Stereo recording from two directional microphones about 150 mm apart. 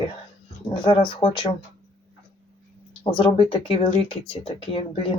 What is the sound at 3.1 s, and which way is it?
Speech, 35° left (ahead or behind).